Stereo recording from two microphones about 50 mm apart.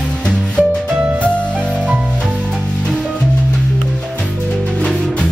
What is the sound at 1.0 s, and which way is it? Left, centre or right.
Music, right.